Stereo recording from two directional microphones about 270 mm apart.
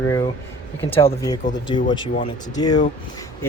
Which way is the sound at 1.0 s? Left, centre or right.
Centre.